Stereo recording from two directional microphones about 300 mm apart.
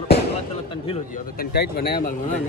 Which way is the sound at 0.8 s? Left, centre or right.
Left.